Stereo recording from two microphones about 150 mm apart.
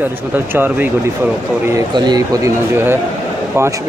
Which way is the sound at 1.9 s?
30° right (ahead or behind).